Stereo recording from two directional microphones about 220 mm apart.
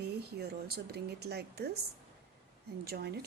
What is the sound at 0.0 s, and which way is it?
Speech, 45° right (ahead or behind).